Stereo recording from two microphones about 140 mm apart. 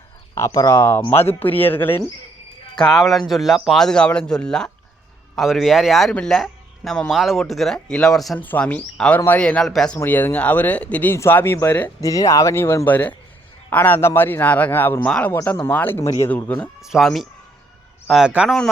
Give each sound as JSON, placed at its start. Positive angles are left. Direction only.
{"t": 0.3, "sound": "speech", "side_deg": 25}
{"t": 2.7, "sound": "a man's voice", "side_deg": 5}
{"t": 10.0, "sound": "speech", "side_deg": 15}
{"t": 16.8, "sound": "a man's voice", "side_deg": 0}